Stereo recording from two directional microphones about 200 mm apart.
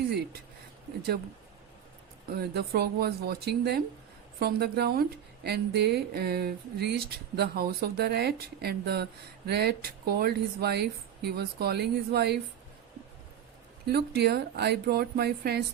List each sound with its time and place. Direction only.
2.3 s a woman's voice: 55° right (ahead or behind)
13.8 s a woman's voice: 55° right (ahead or behind)